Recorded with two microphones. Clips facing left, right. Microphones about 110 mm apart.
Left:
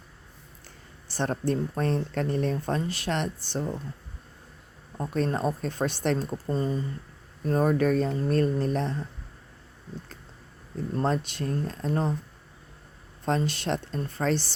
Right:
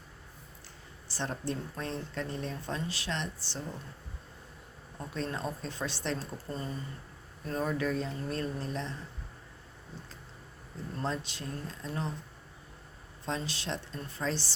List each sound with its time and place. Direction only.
1.1 s speech: 55° left (ahead or behind)
4.9 s speech: 50° left (ahead or behind)
6.5 s speech: 35° left (ahead or behind)
7.4 s speech: 45° left (ahead or behind)
11.0 s speech: 55° left (ahead or behind)
13.2 s speech: 55° left (ahead or behind)